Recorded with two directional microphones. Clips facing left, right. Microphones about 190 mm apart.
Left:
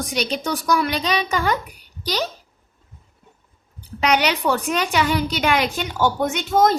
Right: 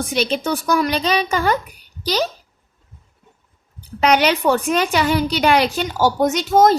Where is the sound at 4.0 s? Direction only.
40° right (ahead or behind).